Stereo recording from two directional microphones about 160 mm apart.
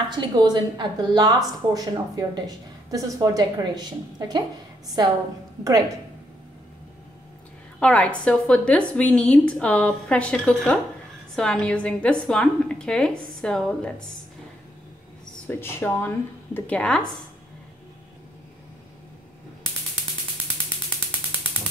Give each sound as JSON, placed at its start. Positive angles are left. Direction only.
{"t": 0.1, "sound": "a woman's voice", "side_deg": -25}
{"t": 4.8, "sound": "a woman's voice", "side_deg": -25}
{"t": 7.8, "sound": "a woman's voice", "side_deg": 10}
{"t": 15.4, "sound": "a woman's voice", "side_deg": 15}